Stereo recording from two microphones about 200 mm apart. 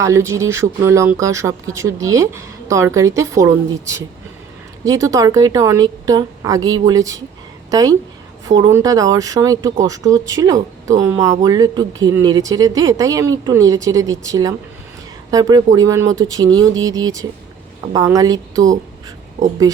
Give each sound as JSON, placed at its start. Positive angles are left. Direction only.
{"t": 0.0, "sound": "speech", "side_deg": -15}
{"t": 19.7, "sound": "speech", "side_deg": -20}